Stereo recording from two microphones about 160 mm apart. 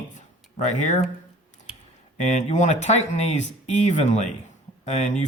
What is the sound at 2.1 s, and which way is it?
Speech, 50° left (ahead or behind).